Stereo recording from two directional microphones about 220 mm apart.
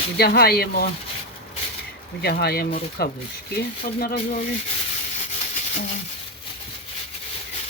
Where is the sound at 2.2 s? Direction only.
45° left (ahead or behind).